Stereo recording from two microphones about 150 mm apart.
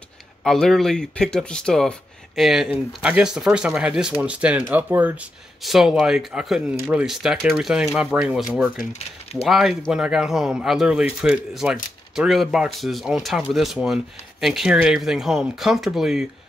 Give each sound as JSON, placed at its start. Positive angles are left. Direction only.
{"t": 0.4, "sound": "speech", "side_deg": 0}
{"t": 8.9, "sound": "speech", "side_deg": 45}
{"t": 9.5, "sound": "speech", "side_deg": 0}